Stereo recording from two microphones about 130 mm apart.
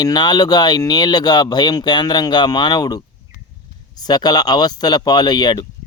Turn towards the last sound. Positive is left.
turn(degrees=35)  # may be behind; listen again after turning